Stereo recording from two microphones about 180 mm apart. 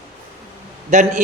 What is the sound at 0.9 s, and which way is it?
Speech, 40° right (ahead or behind).